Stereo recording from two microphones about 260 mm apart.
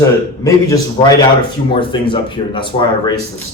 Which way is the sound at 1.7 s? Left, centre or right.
Centre.